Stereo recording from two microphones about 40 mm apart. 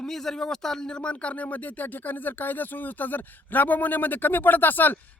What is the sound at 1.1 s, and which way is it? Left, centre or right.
Speech, left.